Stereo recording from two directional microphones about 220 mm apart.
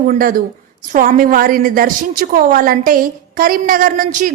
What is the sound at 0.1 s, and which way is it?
A woman's voice, 40° right (ahead or behind).